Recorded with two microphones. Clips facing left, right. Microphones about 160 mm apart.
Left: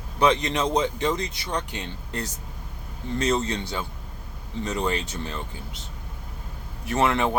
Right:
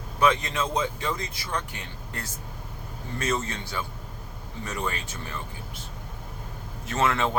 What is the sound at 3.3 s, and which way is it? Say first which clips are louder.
Speech: left 1 dB; 20° left (ahead or behind).